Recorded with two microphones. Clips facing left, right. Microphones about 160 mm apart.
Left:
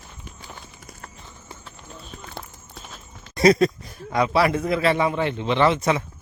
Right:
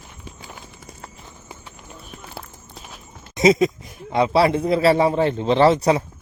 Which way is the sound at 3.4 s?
20° right (ahead or behind).